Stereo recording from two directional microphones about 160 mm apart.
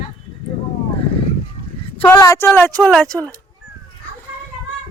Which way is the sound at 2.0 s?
15° left (ahead or behind).